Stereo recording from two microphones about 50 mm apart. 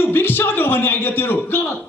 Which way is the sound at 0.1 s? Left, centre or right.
Left.